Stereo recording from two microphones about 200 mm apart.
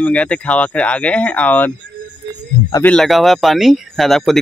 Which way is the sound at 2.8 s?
5° left (ahead or behind).